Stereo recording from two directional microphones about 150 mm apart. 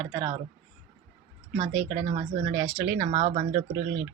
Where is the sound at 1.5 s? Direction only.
50° right (ahead or behind).